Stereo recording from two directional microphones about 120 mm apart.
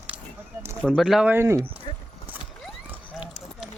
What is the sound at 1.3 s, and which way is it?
Speech, 25° right (ahead or behind).